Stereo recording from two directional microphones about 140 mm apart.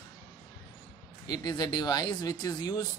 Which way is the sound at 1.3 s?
30° left (ahead or behind).